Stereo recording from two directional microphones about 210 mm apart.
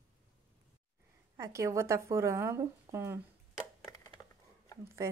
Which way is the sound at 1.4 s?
15° right (ahead or behind).